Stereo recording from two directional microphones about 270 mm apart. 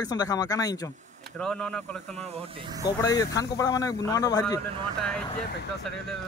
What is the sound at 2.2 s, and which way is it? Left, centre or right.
Speech, right.